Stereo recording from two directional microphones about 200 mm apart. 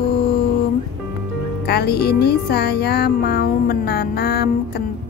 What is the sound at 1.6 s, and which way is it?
Speech, 55° left (ahead or behind).